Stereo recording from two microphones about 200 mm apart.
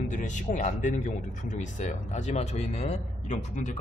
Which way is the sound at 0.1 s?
40° left (ahead or behind).